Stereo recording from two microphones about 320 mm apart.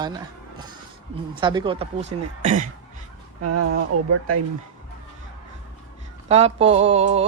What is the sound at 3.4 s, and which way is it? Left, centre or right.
Speech, right.